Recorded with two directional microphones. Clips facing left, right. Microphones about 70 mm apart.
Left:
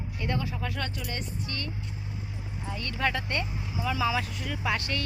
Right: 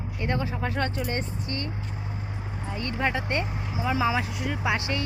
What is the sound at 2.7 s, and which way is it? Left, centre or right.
Speech, right.